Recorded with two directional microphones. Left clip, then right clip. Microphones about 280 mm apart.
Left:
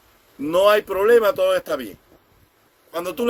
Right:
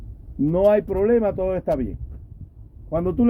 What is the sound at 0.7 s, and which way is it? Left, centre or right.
Speech, centre.